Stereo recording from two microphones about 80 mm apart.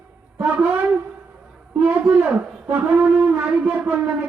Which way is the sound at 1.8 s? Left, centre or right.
Centre.